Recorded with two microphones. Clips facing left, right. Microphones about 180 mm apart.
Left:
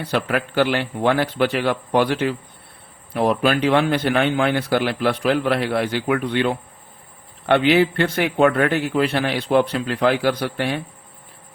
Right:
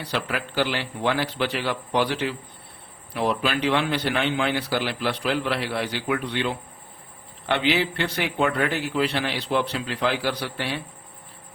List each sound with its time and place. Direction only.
0.0 s a man's voice: 50° left (ahead or behind)